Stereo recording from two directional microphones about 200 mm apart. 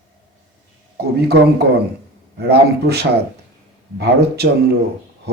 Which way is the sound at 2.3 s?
55° right (ahead or behind).